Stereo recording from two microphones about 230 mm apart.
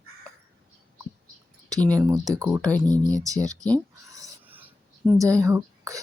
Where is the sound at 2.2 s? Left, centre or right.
Centre.